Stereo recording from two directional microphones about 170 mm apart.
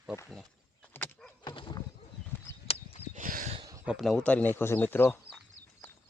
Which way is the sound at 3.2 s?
50° right (ahead or behind).